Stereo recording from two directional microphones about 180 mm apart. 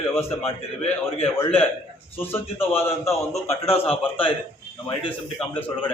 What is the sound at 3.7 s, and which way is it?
Speech, 30° left (ahead or behind).